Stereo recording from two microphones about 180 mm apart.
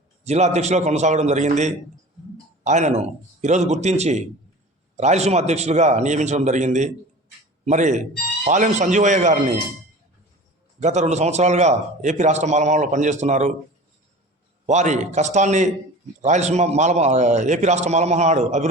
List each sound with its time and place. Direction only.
0.3 s a man's voice: 40° right (ahead or behind)
10.8 s a man's voice: 40° right (ahead or behind)
14.7 s a man's voice: 40° right (ahead or behind)